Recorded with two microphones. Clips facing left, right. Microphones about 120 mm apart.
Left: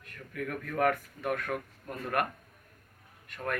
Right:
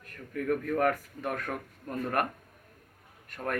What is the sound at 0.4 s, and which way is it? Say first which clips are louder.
Speech: right 2 dB; 35° right (ahead or behind).